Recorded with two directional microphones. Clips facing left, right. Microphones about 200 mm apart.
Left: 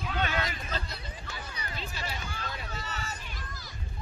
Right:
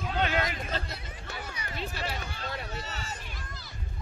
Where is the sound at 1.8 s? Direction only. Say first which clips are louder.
Right 5 dB; 60° right (ahead or behind).